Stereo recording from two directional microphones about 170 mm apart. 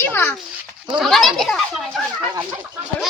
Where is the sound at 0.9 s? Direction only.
Centre (ahead or behind).